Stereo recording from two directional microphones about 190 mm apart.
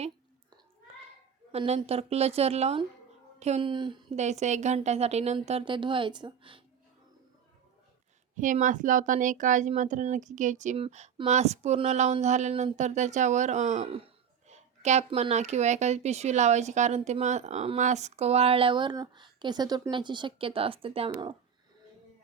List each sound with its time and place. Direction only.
1.5 s a woman's voice: 30° right (ahead or behind)
4.2 s speech: 35° right (ahead or behind)
8.4 s speech: 40° right (ahead or behind)